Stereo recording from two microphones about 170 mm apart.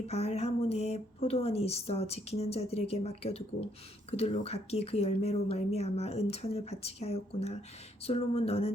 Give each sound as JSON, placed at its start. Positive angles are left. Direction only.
{"t": 0.1, "sound": "speech", "side_deg": 40}